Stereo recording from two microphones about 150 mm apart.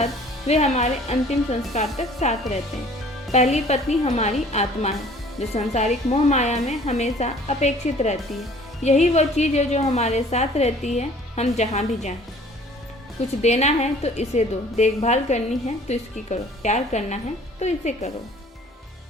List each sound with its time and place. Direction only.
0.0 s a woman's voice: 45° left (ahead or behind)
1.9 s speech: centre (ahead or behind)
3.3 s a woman's voice: 45° left (ahead or behind)
13.4 s a woman's voice: 50° left (ahead or behind)